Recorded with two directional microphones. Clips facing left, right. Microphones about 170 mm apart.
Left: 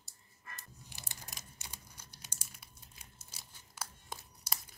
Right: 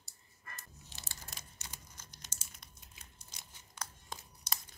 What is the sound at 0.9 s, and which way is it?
Crumpling, 15° left (ahead or behind).